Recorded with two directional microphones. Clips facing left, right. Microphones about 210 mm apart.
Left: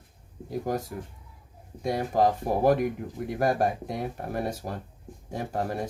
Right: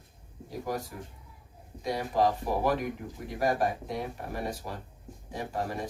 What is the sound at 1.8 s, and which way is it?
Speech, 50° left (ahead or behind).